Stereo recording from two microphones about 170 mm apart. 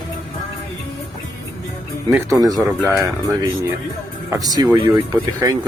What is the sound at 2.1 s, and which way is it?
Speech, 20° right (ahead or behind).